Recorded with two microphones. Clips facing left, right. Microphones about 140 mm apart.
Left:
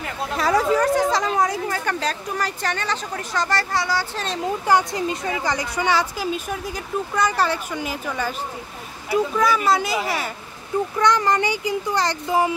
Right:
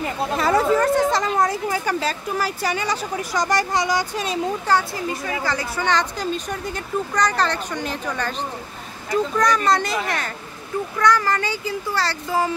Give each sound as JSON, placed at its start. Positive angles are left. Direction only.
{"t": 0.4, "sound": "speech", "side_deg": 0}
{"t": 4.6, "sound": "a woman's voice", "side_deg": 15}
{"t": 11.0, "sound": "a child's voice", "side_deg": 20}